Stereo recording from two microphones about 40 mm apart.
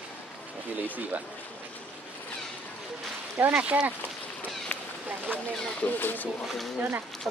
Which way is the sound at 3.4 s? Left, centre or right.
Right.